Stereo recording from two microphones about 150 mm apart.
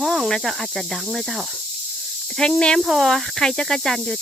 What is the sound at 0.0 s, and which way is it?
Speech, centre (ahead or behind).